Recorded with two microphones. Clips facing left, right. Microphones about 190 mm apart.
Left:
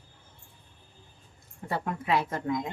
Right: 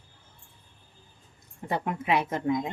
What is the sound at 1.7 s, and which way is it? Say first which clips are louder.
A woman's voice: right 2 dB; 20° right (ahead or behind).